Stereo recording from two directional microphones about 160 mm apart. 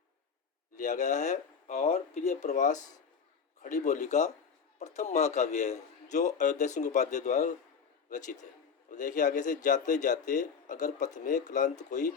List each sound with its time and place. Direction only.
0.8 s a man's voice: 50° left (ahead or behind)